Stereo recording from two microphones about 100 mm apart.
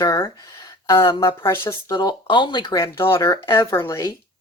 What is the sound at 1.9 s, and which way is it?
Speech, 45° left (ahead or behind).